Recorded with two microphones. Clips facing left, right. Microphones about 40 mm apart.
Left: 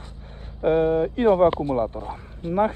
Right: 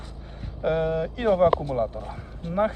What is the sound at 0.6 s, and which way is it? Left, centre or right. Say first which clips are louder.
Speech: left 5 dB; left.